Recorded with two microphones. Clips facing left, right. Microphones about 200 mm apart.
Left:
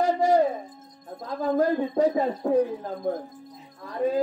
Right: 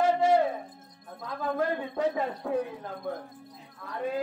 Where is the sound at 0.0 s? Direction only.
40° left (ahead or behind).